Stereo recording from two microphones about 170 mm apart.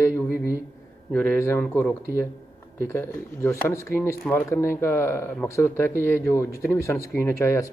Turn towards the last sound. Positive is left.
turn(degrees=15)  # may be behind; listen again after turning